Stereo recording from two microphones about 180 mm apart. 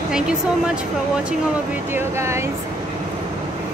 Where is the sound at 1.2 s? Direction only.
10° right (ahead or behind).